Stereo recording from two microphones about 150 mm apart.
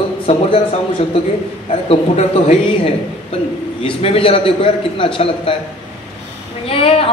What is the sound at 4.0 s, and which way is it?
A man's voice, 40° left (ahead or behind).